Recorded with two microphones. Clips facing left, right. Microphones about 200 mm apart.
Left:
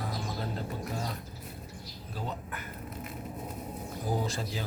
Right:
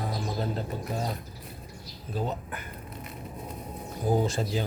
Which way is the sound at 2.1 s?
20° right (ahead or behind).